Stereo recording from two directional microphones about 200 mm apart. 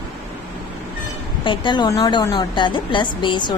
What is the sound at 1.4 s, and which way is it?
A woman's voice, 25° left (ahead or behind).